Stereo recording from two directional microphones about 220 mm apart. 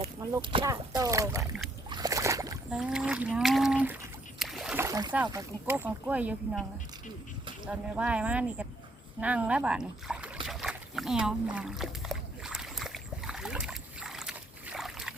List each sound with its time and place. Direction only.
0.0 s speech: 20° right (ahead or behind)
1.9 s boat: 15° right (ahead or behind)
2.7 s speech: 5° right (ahead or behind)
7.7 s speech: 5° right (ahead or behind)
10.4 s boat: centre (ahead or behind)